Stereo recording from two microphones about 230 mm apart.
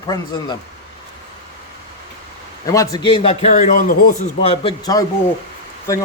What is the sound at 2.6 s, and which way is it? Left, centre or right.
A man's voice, centre.